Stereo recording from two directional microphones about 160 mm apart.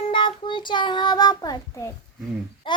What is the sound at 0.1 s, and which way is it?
Child singing, 30° left (ahead or behind).